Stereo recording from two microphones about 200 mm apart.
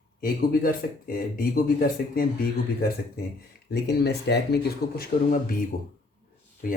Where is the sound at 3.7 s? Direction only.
55° left (ahead or behind).